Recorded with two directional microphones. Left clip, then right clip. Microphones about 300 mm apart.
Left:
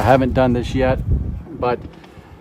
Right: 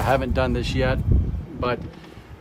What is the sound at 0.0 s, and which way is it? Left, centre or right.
Speech, left.